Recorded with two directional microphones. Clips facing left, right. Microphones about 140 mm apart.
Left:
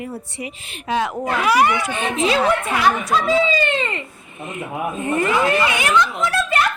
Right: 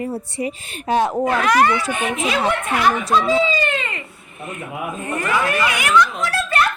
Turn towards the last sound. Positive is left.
turn(degrees=20)  # may be behind; listen again after turning